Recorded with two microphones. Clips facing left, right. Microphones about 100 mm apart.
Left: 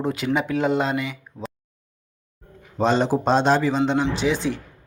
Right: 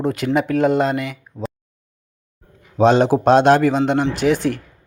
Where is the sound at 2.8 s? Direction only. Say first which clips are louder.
Right 6 dB; 65° right (ahead or behind).